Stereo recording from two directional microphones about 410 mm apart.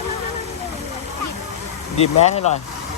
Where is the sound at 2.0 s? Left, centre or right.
Centre.